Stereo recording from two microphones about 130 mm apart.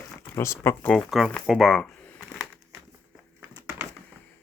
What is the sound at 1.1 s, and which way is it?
Speech, 5° right (ahead or behind).